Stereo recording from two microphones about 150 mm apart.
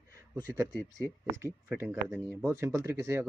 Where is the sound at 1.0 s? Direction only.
20° right (ahead or behind).